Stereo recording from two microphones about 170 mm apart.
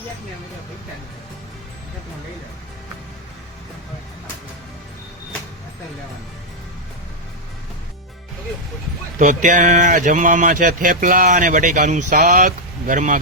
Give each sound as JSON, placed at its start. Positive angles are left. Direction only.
{"t": 9.1, "sound": "speech", "side_deg": -50}